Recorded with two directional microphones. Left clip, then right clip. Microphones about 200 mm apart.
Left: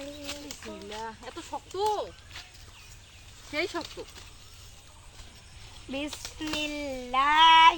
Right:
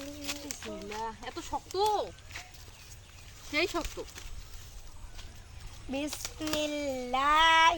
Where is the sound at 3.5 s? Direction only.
30° right (ahead or behind).